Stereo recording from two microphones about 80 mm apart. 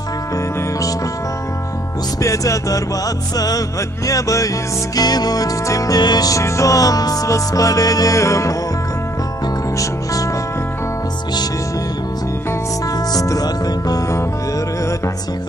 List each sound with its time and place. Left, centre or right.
2.2 s music: left
6.4 s music: left
13.1 s music: left